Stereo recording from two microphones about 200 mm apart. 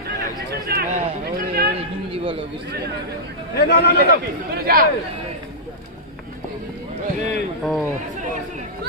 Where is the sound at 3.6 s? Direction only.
55° left (ahead or behind).